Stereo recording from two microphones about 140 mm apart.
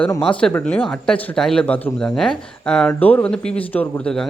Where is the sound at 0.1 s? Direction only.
35° left (ahead or behind).